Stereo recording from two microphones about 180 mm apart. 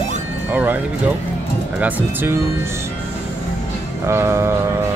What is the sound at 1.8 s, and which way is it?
Music, 15° right (ahead or behind).